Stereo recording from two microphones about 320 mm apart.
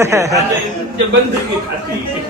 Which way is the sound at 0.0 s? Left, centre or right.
Centre.